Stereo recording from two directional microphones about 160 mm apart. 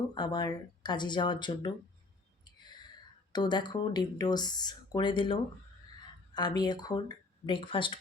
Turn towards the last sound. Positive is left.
turn(degrees=30)  # may be behind; listen again after turning